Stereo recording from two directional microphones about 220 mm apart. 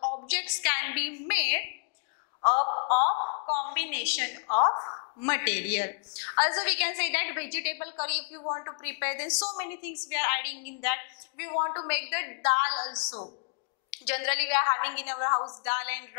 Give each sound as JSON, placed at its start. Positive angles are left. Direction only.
{"t": 0.3, "sound": "a woman's voice", "side_deg": 10}
{"t": 2.6, "sound": "a sound", "side_deg": 30}
{"t": 3.2, "sound": "a woman's voice", "side_deg": 30}
{"t": 3.7, "sound": "a woman's voice", "side_deg": 10}
{"t": 4.6, "sound": "a woman's voice", "side_deg": 25}
{"t": 5.3, "sound": "a woman's voice", "side_deg": 10}
{"t": 8.4, "sound": "a woman's voice", "side_deg": 20}
{"t": 12.7, "sound": "a woman's voice", "side_deg": 25}
{"t": 14.0, "sound": "a woman's voice", "side_deg": 10}